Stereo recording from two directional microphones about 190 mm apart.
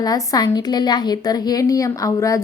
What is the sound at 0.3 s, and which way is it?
A woman's voice, 20° left (ahead or behind).